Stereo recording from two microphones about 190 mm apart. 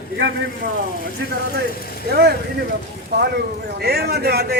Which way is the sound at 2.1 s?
55° right (ahead or behind).